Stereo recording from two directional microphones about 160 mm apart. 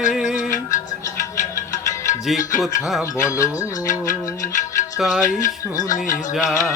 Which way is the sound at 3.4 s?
55° left (ahead or behind).